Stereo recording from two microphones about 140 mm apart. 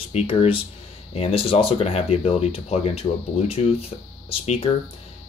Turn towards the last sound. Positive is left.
turn(degrees=45)  # may be behind; listen again after turning